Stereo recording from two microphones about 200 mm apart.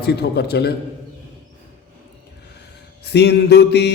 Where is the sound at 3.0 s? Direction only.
55° left (ahead or behind).